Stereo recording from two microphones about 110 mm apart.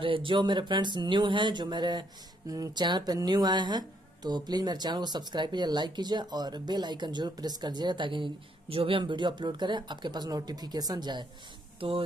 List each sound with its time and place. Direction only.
0.0 s speech: 50° right (ahead or behind)
11.8 s speech: 55° right (ahead or behind)